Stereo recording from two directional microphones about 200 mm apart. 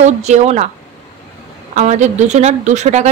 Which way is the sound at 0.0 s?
35° right (ahead or behind).